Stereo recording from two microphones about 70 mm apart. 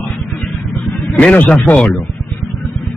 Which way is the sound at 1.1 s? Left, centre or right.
Centre.